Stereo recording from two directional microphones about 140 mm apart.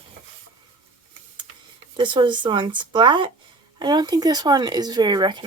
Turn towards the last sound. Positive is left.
turn(degrees=-30)  # may be behind; listen again after turning